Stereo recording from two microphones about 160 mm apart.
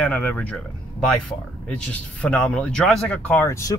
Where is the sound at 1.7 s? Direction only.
10° left (ahead or behind).